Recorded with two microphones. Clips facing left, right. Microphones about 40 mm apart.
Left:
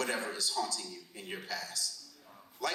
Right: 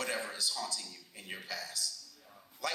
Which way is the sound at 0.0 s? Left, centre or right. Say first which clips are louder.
Left 2 dB; left.